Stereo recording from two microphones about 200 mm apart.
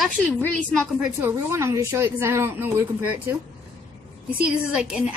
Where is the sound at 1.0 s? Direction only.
15° right (ahead or behind).